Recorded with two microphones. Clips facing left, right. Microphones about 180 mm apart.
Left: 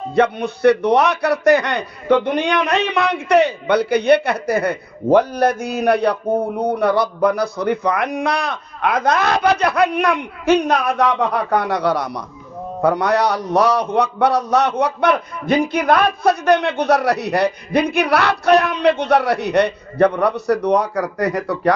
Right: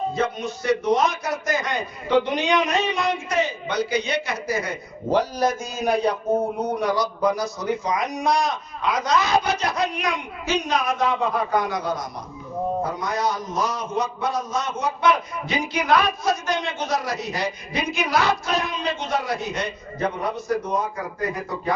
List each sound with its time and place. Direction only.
0.1 s a man's voice: 65° left (ahead or behind)